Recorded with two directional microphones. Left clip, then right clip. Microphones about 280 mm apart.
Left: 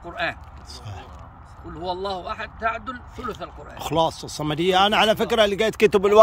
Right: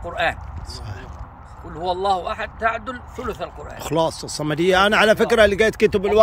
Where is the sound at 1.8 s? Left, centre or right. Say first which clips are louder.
Right 7 dB; centre.